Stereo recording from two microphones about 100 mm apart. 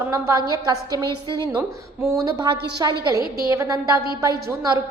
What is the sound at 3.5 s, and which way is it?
Speech, 30° right (ahead or behind).